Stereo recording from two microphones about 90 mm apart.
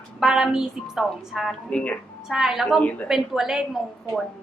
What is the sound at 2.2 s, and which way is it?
Speech, 5° right (ahead or behind).